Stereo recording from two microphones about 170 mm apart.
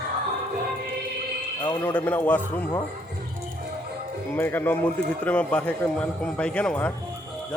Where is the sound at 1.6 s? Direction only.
10° left (ahead or behind).